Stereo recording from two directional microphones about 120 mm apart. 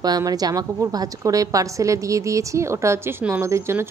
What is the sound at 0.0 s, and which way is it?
A woman's voice, 35° right (ahead or behind).